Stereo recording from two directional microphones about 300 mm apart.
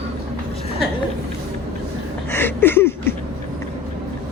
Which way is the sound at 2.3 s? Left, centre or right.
Centre.